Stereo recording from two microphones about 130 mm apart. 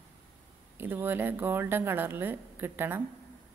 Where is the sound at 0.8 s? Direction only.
15° right (ahead or behind).